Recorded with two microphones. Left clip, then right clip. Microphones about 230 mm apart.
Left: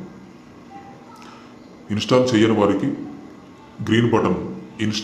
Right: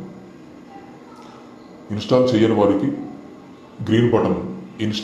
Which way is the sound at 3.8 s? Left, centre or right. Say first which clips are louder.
Right 1 dB; centre.